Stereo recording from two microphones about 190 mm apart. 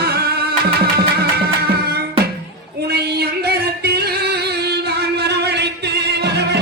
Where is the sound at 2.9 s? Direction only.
55° right (ahead or behind).